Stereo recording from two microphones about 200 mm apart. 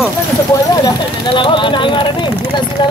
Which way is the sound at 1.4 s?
25° left (ahead or behind).